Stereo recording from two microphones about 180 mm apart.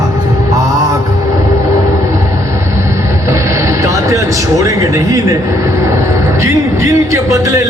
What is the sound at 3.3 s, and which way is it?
Speech, 15° right (ahead or behind).